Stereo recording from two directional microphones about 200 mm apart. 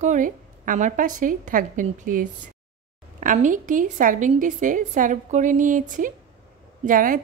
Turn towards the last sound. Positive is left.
turn(degrees=-40)  # may be behind; listen again after turning